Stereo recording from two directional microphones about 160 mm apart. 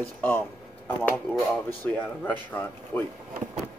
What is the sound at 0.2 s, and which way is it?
Speech, 10° left (ahead or behind).